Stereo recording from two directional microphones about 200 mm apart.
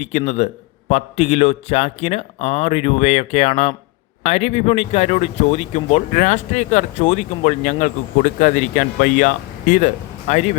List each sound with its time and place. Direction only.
0.0 s speech: 35° left (ahead or behind)